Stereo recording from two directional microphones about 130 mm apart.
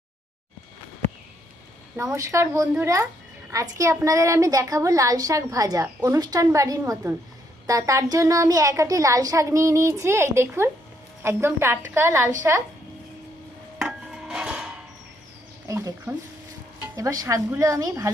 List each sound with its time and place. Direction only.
2.1 s a woman's voice: 20° right (ahead or behind)
13.7 s a sound: 5° right (ahead or behind)
15.6 s a woman's voice: 25° right (ahead or behind)